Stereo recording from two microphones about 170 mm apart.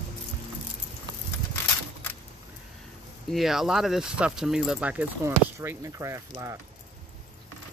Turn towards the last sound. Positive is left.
turn(degrees=-15)  # may be behind; listen again after turning